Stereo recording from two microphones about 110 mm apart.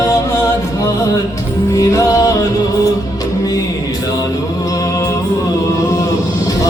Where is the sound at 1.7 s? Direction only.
30° left (ahead or behind).